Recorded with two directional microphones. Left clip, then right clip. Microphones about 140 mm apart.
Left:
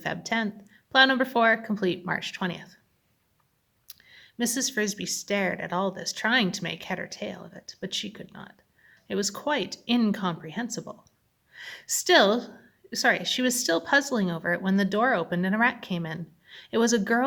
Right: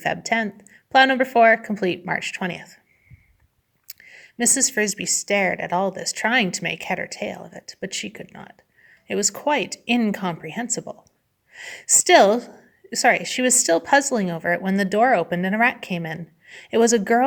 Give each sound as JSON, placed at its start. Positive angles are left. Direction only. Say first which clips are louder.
{"t": 0.0, "sound": "a woman's voice", "louder": "right 6 dB", "side_deg": -25}
{"t": 4.1, "sound": "a woman's voice", "louder": "right 7 dB", "side_deg": -25}